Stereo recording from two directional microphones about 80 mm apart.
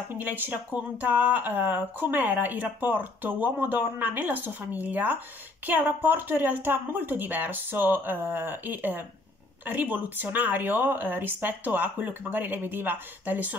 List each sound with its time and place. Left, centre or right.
0.2 s speech: right